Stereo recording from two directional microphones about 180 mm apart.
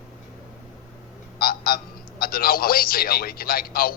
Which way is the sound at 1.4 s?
55° left (ahead or behind).